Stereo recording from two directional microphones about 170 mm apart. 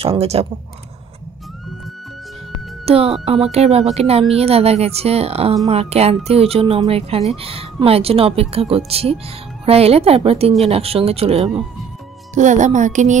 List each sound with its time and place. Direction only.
0.0 s speech: 35° right (ahead or behind)
2.8 s speech: 35° right (ahead or behind)
12.4 s music: 45° right (ahead or behind)